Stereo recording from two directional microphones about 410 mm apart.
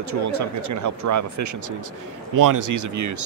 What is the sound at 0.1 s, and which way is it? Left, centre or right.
A man's voice, right.